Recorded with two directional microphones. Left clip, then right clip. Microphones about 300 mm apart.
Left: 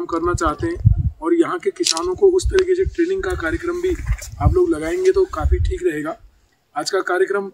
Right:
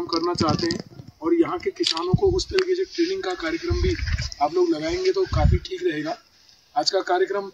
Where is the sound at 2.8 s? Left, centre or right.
Centre.